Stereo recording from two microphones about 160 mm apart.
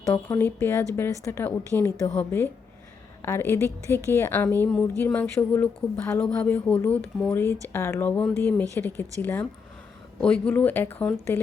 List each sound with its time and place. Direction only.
0.0 s speech: 10° left (ahead or behind)